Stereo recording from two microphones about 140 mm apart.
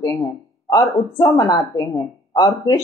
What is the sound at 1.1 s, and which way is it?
A woman's voice, 25° left (ahead or behind).